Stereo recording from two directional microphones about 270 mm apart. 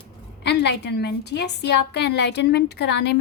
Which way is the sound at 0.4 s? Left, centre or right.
Left.